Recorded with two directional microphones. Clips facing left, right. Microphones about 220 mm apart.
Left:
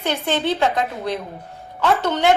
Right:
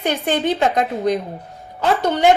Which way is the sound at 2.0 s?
15° right (ahead or behind).